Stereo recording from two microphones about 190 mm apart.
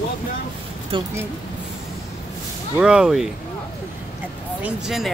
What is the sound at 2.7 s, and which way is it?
Speech, 5° right (ahead or behind).